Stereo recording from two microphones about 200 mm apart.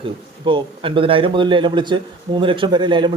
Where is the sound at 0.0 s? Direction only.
25° right (ahead or behind).